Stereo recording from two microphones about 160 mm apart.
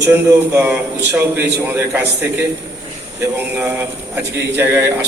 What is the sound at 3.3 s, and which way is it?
A man's voice, 15° right (ahead or behind).